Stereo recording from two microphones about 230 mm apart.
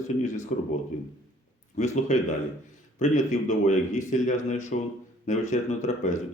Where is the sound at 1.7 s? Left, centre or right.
Left.